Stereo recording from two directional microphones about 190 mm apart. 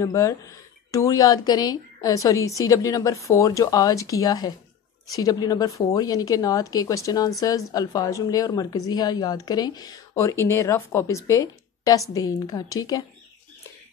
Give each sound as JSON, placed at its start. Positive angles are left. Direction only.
{"t": 0.0, "sound": "a woman's voice", "side_deg": 15}